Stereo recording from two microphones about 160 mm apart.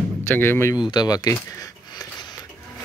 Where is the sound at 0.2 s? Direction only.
15° left (ahead or behind).